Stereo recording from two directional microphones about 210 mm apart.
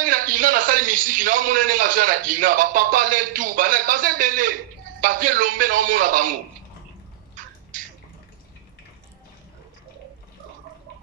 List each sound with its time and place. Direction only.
0.0 s a man's voice: 40° right (ahead or behind)